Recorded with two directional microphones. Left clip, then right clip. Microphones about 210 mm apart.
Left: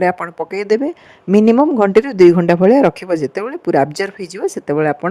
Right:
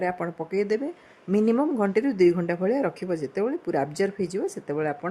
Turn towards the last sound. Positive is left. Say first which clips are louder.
# left 12 dB
turn(degrees=40)  # may be behind; listen again after turning